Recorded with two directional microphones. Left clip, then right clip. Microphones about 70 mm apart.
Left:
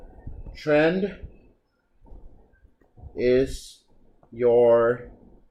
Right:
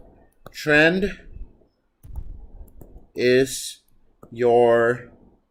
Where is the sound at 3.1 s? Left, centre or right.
Right.